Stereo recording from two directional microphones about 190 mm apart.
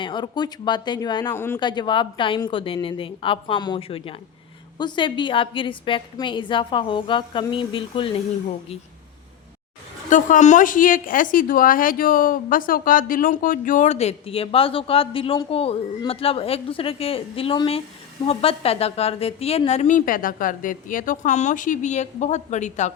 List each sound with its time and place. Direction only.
0.0 s a woman's voice: 25° left (ahead or behind)
1.3 s speech: 10° left (ahead or behind)
1.5 s a woman's voice: 25° left (ahead or behind)
10.1 s a woman's voice: 40° left (ahead or behind)